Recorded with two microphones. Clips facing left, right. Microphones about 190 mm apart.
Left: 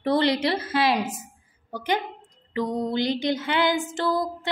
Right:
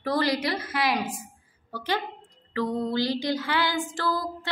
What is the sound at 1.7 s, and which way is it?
Speech, 15° left (ahead or behind).